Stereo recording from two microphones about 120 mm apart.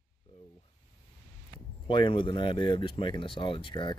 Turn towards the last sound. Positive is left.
turn(degrees=45)  # may be behind; listen again after turning